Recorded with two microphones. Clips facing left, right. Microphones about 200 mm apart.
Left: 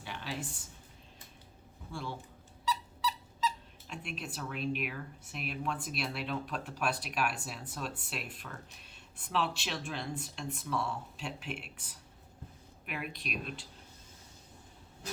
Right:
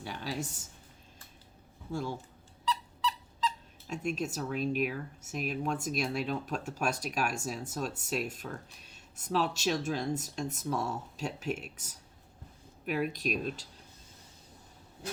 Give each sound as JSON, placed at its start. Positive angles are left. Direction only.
{"t": 0.0, "sound": "speech", "side_deg": -40}
{"t": 1.9, "sound": "speech", "side_deg": -45}
{"t": 2.6, "sound": "a sound", "side_deg": 10}
{"t": 3.8, "sound": "speech", "side_deg": -45}